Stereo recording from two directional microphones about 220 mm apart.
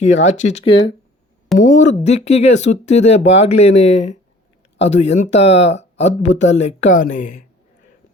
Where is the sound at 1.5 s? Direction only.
35° left (ahead or behind).